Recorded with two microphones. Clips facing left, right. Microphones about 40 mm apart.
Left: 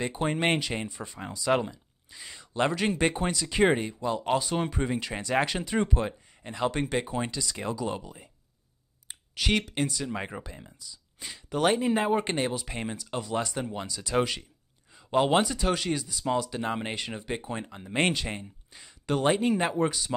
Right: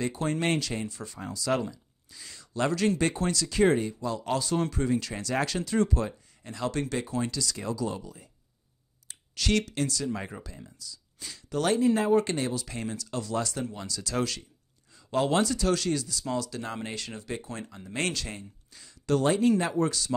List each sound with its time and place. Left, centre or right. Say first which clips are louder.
0.0 s speech: left 1 dB; left